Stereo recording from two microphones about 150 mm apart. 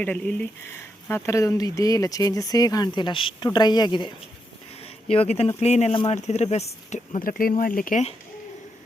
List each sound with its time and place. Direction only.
0.0 s speech: 10° left (ahead or behind); by 4.1 s 30° left (ahead or behind)
4.8 s a sound: 40° left (ahead or behind)
5.5 s speech: 45° left (ahead or behind)
5.9 s speech: 35° left (ahead or behind)
6.1 s speech: 50° left (ahead or behind)
7.2 s speech: 70° left (ahead or behind)